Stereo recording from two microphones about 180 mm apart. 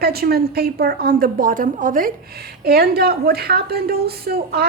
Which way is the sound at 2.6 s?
60° right (ahead or behind).